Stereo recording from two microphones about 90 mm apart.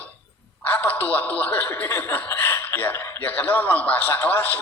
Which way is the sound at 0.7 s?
20° left (ahead or behind).